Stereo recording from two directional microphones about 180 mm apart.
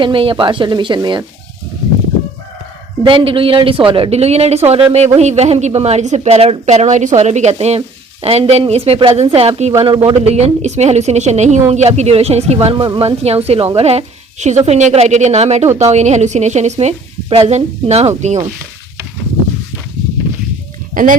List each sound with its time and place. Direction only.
0.0 s speech: 30° right (ahead or behind)
3.0 s a woman's voice: 30° right (ahead or behind)
20.9 s speech: 50° right (ahead or behind)